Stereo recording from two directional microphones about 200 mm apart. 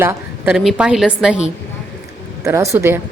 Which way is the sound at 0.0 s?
10° right (ahead or behind).